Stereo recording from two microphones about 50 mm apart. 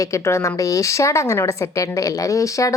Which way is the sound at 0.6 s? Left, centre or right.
Left.